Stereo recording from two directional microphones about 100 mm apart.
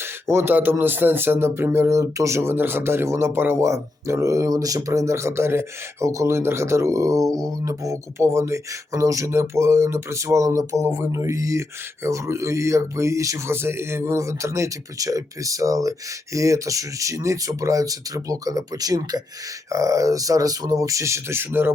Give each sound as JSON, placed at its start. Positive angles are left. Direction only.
{"t": 0.0, "sound": "speech", "side_deg": -25}